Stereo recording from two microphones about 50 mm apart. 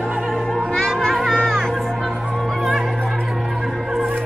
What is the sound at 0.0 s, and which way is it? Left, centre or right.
Music, centre.